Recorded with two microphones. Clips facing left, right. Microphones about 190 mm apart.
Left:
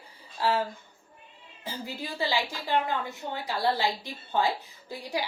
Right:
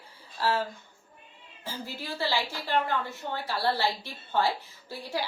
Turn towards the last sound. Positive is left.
turn(degrees=15)  # may be behind; listen again after turning